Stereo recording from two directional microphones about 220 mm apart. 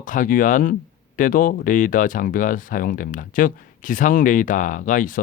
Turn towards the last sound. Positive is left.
turn(degrees=35)  # may be behind; listen again after turning